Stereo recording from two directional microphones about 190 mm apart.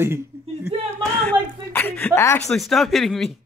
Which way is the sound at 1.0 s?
5° left (ahead or behind).